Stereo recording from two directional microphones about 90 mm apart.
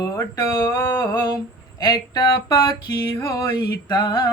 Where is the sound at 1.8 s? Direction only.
50° left (ahead or behind).